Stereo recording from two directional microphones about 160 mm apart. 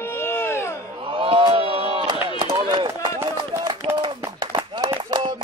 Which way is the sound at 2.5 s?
25° right (ahead or behind).